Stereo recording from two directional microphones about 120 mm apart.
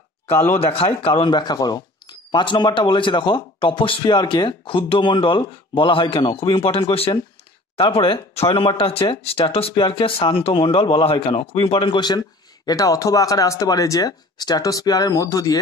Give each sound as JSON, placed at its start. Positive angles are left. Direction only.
{"t": 0.3, "sound": "speech", "side_deg": 20}
{"t": 0.7, "sound": "speech", "side_deg": 50}
{"t": 6.7, "sound": "speech", "side_deg": 50}